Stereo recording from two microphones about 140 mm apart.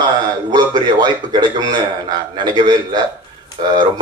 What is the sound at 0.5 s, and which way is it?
A man's voice, 30° right (ahead or behind).